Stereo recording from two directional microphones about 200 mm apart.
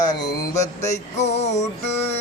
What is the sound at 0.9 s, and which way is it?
Music, 35° left (ahead or behind).